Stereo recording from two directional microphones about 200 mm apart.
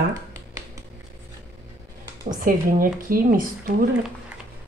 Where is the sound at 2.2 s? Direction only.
45° right (ahead or behind).